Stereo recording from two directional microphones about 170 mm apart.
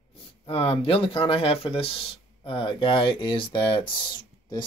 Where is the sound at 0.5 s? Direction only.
35° left (ahead or behind).